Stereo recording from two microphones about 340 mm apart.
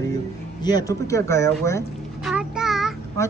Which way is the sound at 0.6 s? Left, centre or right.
Centre.